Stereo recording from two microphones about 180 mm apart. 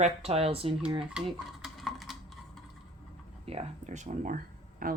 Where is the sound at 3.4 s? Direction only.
35° right (ahead or behind); by 5.0 s 50° right (ahead or behind).